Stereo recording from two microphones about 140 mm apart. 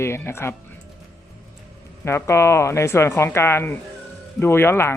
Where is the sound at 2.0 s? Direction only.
20° left (ahead or behind).